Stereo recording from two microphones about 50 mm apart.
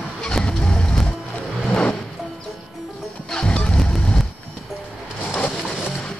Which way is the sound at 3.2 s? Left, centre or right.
Left.